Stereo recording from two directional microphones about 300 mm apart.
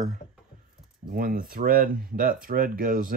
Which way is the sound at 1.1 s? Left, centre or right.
Right.